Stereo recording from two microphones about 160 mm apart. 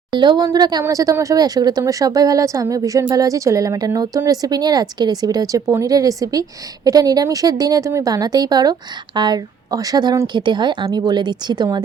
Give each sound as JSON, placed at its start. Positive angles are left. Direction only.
{"t": 0.1, "sound": "speech", "side_deg": -30}